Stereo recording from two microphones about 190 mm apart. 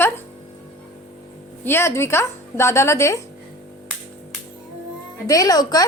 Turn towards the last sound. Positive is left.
turn(degrees=20)  # may be behind; listen again after turning